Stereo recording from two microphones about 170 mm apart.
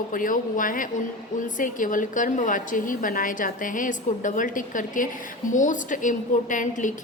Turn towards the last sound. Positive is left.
turn(degrees=50)  # may be behind; listen again after turning